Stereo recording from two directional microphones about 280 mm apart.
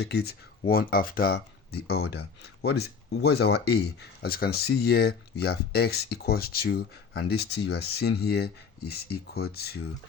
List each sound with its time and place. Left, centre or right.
0.0 s speech: left